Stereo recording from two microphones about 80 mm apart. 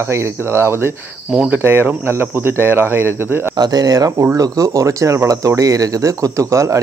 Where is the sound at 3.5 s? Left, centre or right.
Right.